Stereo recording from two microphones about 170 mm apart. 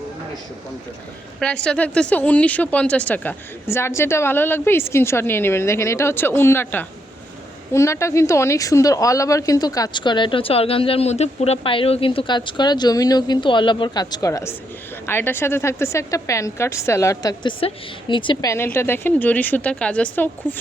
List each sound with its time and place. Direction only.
1.6 s speech: 5° left (ahead or behind); by 18.5 s 30° left (ahead or behind)
18.5 s speech: 15° left (ahead or behind)